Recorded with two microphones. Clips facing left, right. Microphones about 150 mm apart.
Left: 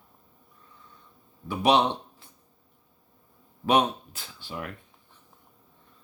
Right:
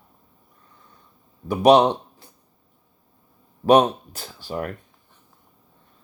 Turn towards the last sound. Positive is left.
turn(degrees=-40)  # may be behind; listen again after turning